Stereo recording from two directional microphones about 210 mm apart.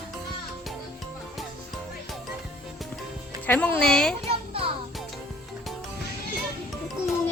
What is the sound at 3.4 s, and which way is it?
Speech, 10° left (ahead or behind).